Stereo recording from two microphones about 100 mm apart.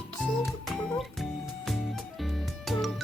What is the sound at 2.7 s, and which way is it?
Music, centre (ahead or behind).